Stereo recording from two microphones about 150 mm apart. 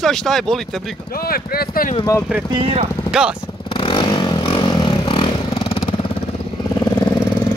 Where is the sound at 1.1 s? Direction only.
85° left.